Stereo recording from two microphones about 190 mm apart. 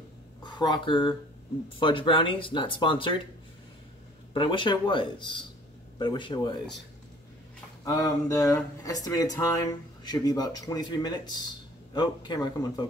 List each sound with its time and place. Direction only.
0.4 s speech: 25° left (ahead or behind)
4.3 s speech: 25° left (ahead or behind)
7.8 s speech: 20° left (ahead or behind)